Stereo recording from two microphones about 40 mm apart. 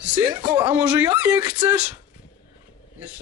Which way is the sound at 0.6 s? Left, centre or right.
Right.